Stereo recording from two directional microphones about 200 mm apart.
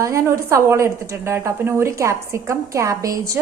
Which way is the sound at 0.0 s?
15° right (ahead or behind).